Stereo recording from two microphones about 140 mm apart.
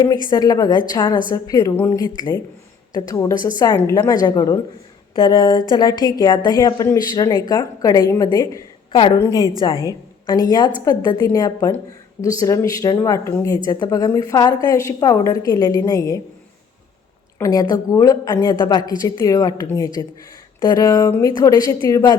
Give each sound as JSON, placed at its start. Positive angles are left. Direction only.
{"t": 0.3, "sound": "a woman's voice", "side_deg": 25}
{"t": 8.9, "sound": "a woman's voice", "side_deg": 40}
{"t": 9.1, "sound": "a woman's voice", "side_deg": 20}
{"t": 17.3, "sound": "a woman's voice", "side_deg": 25}